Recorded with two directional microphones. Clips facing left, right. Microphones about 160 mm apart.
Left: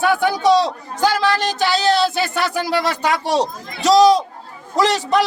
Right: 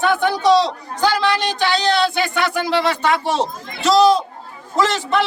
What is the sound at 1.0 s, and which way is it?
A man's voice, 40° left (ahead or behind).